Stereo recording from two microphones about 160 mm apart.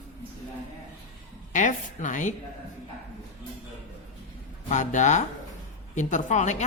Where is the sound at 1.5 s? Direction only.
50° left (ahead or behind).